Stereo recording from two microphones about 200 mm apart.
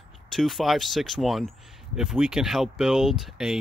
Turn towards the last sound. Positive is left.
turn(degrees=0)  # may be behind; listen again after turning